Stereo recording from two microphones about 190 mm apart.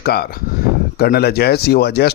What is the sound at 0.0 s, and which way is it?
A man's voice, 55° left (ahead or behind).